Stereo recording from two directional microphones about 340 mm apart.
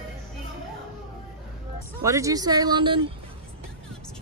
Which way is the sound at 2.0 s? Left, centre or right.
Centre.